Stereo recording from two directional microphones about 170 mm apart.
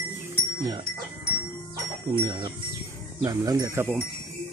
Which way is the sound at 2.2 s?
25° right (ahead or behind).